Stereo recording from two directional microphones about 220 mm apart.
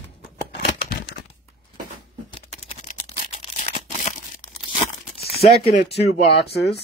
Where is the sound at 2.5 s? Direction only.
30° left (ahead or behind).